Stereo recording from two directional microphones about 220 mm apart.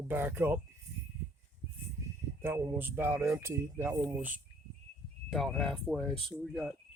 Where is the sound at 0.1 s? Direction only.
10° right (ahead or behind).